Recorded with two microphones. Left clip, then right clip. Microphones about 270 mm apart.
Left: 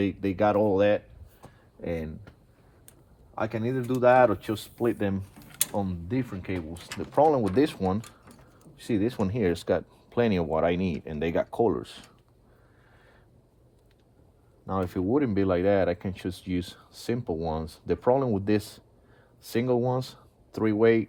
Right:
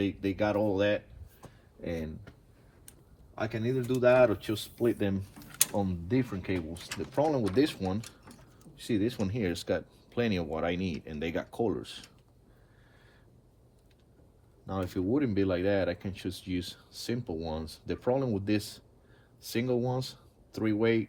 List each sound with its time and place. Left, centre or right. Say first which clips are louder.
0.0 s speech: left 5 dB; left
1.4 s a sound: left 4 dB; centre
3.3 s speech: left 3 dB; left
5.3 s speech: left 1 dB; centre
7.0 s speech: left 7 dB; left
8.0 s typing: left 1 dB; centre
8.7 s speech: left 3 dB; left
14.7 s speech: left 5 dB; left